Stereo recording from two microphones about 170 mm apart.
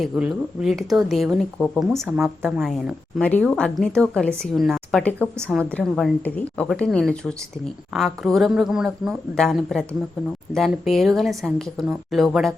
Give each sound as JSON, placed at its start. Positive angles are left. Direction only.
{"t": 0.0, "sound": "speech", "side_deg": 0}
{"t": 1.9, "sound": "a woman's voice", "side_deg": -15}
{"t": 2.6, "sound": "speech", "side_deg": 0}
{"t": 5.5, "sound": "a woman's voice", "side_deg": -10}
{"t": 5.7, "sound": "speech", "side_deg": 5}